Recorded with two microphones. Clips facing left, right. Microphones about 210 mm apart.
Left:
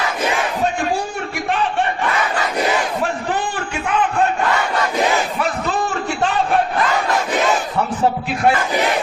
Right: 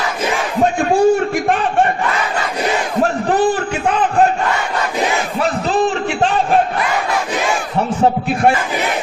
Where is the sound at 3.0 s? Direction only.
35° right (ahead or behind).